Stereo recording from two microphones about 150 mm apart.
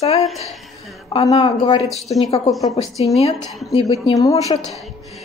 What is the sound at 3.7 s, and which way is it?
Speech, 40° left (ahead or behind).